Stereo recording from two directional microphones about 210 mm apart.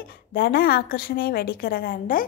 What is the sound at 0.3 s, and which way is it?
A woman's voice, 45° left (ahead or behind).